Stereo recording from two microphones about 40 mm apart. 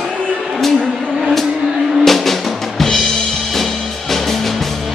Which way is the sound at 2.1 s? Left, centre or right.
Centre.